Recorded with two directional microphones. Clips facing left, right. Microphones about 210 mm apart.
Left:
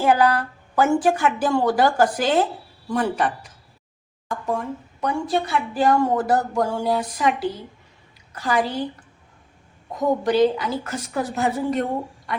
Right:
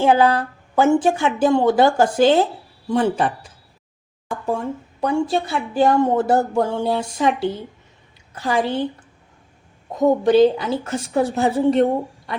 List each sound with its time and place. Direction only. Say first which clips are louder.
0.0 s a woman's voice: right 3 dB; 25° right (ahead or behind)
9.9 s a woman's voice: right 5 dB; 25° right (ahead or behind)